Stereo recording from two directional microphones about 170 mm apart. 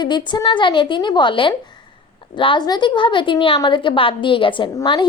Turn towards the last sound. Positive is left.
turn(degrees=25)  # may be behind; listen again after turning